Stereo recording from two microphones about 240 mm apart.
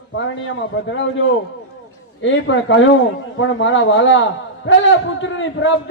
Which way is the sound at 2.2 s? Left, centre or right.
Left.